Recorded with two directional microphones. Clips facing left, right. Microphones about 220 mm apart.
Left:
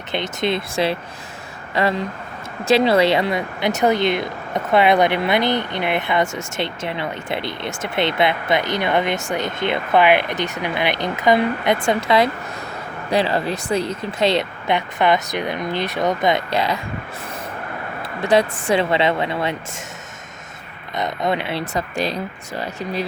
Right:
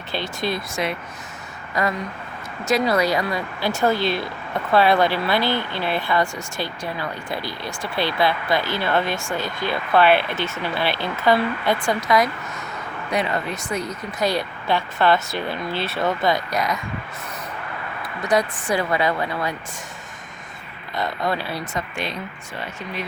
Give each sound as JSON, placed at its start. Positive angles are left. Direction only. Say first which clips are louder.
{"t": 0.1, "sound": "speech", "louder": "left 4 dB", "side_deg": 20}
{"t": 18.0, "sound": "speech", "louder": "left 4 dB", "side_deg": 30}
{"t": 20.9, "sound": "speech", "louder": "left 3 dB", "side_deg": 20}
{"t": 21.8, "sound": "speech", "louder": "left 7 dB", "side_deg": 35}